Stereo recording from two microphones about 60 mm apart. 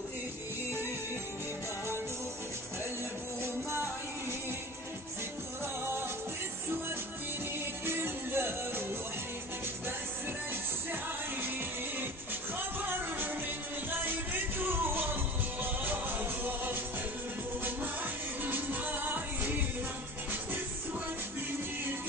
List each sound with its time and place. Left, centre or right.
7.8 s music: right
12.5 s music: right
14.6 s music: right